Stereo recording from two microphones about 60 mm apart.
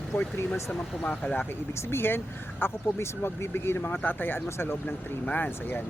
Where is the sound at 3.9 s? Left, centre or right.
Left.